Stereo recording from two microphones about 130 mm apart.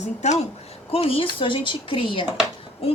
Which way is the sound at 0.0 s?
60° left (ahead or behind).